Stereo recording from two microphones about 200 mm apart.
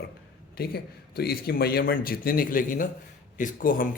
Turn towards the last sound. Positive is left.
turn(degrees=45)  # may be behind; listen again after turning